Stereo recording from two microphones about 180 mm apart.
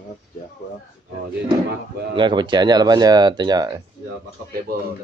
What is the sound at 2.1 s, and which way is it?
A man's voice, 25° right (ahead or behind).